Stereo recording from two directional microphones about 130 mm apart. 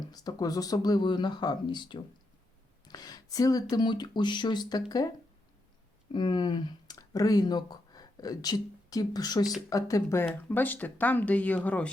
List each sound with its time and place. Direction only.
0.1 s speech: 30° left (ahead or behind)
6.1 s speech: 35° left (ahead or behind); by 11.9 s 10° left (ahead or behind)